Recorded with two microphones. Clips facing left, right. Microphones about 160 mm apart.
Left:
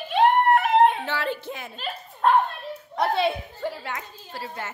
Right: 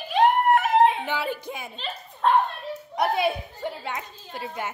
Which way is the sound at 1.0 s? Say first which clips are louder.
Even; 10° right (ahead or behind).